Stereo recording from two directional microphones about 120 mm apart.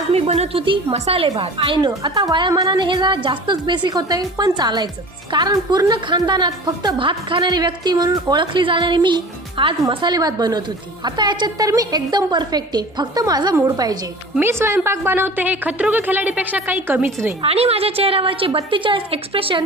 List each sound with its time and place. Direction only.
0.1 s a woman's voice: 60° right (ahead or behind)
1.4 s a woman's voice: 45° right (ahead or behind)
14.3 s a woman's voice: 20° right (ahead or behind)
17.4 s a woman's voice: 55° right (ahead or behind)